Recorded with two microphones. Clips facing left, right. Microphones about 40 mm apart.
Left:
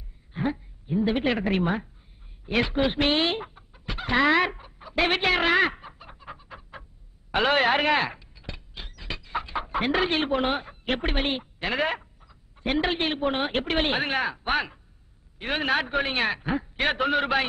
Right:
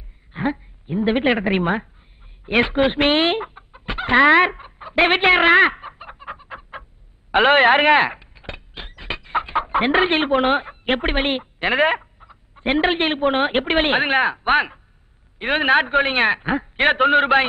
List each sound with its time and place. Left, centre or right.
0.3 s a woman's voice: right
2.4 s chicken: right
15.3 s a man's voice: right